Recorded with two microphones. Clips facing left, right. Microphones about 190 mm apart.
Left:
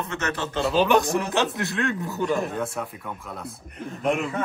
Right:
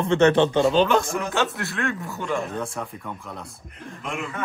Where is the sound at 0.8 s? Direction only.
20° left (ahead or behind).